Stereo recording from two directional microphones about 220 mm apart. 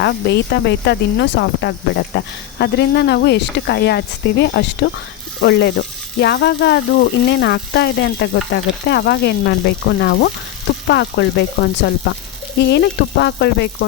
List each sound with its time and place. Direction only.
0.0 s speech: 50° left (ahead or behind)